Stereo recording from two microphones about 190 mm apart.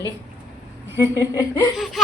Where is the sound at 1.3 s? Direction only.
15° left (ahead or behind).